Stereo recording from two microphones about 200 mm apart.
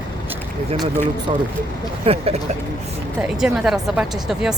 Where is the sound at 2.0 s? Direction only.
30° right (ahead or behind).